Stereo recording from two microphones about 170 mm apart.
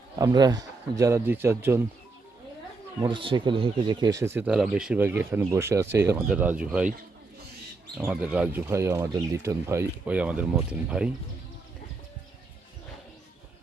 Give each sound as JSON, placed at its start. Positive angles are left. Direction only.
{"t": 0.2, "sound": "a man's voice", "side_deg": -20}
{"t": 3.0, "sound": "speech", "side_deg": -30}
{"t": 7.9, "sound": "speech", "side_deg": -5}